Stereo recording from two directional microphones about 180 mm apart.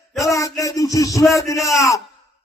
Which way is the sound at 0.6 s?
20° left (ahead or behind).